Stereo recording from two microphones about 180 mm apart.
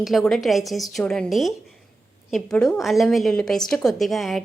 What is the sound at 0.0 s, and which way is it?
A woman's voice, centre (ahead or behind).